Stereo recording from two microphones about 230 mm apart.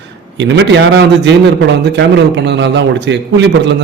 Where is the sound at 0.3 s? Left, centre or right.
Right.